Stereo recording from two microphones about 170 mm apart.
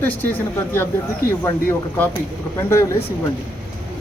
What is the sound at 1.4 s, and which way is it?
Speech, 15° left (ahead or behind).